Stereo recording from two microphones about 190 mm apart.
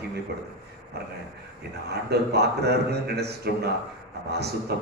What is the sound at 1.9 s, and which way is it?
A man's voice, 60° right (ahead or behind).